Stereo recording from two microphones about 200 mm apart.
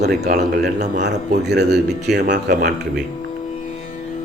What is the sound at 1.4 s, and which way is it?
A man's voice, 55° right (ahead or behind).